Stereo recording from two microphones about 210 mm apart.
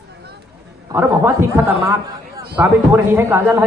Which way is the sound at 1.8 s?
15° right (ahead or behind).